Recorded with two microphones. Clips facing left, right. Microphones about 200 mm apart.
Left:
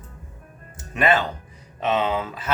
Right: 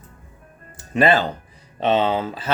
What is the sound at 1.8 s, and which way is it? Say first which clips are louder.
Speech: right 4 dB; 30° right (ahead or behind).